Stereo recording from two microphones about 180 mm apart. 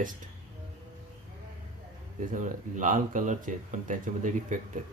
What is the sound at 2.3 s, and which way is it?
Speech, 45° right (ahead or behind).